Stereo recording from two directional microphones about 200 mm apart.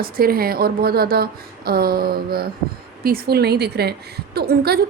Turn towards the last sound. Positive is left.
turn(degrees=-50)  # may be behind; listen again after turning